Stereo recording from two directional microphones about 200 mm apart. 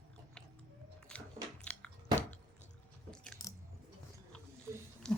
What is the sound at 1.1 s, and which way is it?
Biting, 5° left (ahead or behind).